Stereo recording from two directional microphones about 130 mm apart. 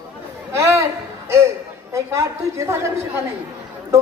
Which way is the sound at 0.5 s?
25° right (ahead or behind).